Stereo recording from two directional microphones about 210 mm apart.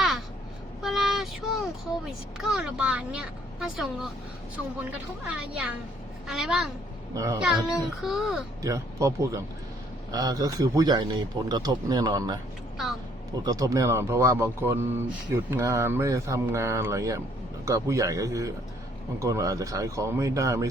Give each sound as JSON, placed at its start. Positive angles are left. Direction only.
{"t": 0.8, "sound": "a woman's voice", "side_deg": 0}
{"t": 7.1, "sound": "speech", "side_deg": -15}
{"t": 7.4, "sound": "a woman's voice", "side_deg": 0}
{"t": 8.6, "sound": "speech", "side_deg": -15}
{"t": 12.7, "sound": "a sound", "side_deg": 0}
{"t": 13.4, "sound": "speech", "side_deg": -15}